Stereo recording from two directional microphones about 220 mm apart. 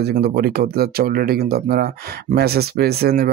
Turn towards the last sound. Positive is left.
turn(degrees=-45)  # may be behind; listen again after turning